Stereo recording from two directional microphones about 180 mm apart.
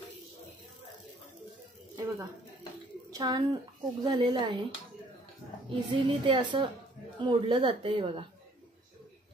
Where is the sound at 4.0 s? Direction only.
25° right (ahead or behind).